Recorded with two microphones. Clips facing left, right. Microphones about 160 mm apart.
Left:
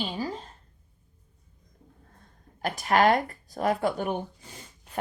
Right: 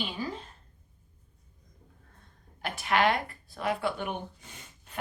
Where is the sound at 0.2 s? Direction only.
35° left (ahead or behind).